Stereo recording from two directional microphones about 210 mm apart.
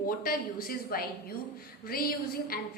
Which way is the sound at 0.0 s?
40° left (ahead or behind).